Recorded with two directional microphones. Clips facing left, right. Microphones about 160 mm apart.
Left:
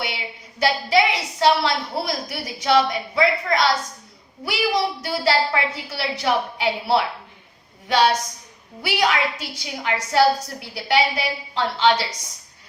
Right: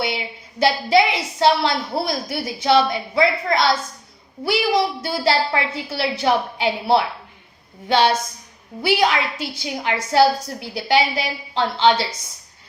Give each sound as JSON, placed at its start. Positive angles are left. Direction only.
{"t": 0.6, "sound": "a woman's voice", "side_deg": -30}